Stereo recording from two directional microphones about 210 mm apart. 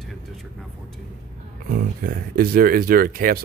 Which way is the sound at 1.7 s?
45° right (ahead or behind).